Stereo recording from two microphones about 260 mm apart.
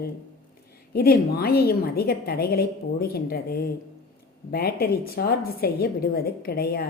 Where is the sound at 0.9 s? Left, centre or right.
Left.